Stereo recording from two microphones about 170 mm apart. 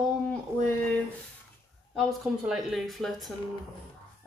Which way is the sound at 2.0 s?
Centre (ahead or behind).